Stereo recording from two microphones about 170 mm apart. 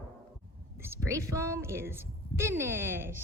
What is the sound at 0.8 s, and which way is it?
A man's voice, 15° right (ahead or behind).